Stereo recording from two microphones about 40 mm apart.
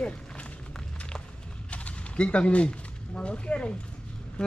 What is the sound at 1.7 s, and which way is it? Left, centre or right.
A woman's voice, left.